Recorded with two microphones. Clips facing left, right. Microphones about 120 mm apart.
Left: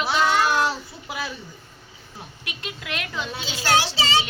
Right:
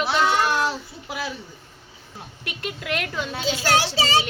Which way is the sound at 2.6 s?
50° right (ahead or behind).